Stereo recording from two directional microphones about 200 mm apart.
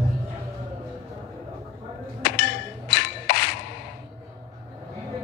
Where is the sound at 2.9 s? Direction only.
60° left (ahead or behind).